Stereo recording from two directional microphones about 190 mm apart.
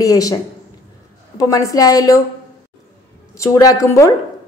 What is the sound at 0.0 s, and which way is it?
Speech, 20° left (ahead or behind).